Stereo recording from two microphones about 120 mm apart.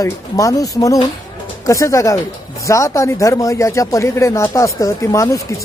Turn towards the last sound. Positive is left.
turn(degrees=25)  # may be behind; listen again after turning